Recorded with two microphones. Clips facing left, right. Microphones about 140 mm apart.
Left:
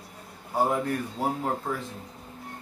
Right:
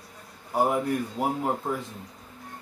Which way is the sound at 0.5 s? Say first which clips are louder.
Right 1 dB; 15° right (ahead or behind).